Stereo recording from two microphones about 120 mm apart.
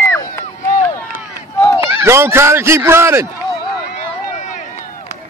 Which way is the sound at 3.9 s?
75° left (ahead or behind).